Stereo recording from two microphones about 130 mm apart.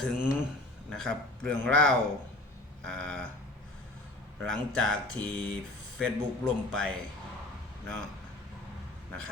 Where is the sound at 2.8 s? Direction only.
5° left (ahead or behind).